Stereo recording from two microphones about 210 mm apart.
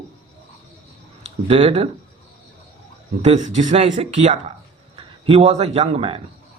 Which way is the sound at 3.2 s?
35° right (ahead or behind).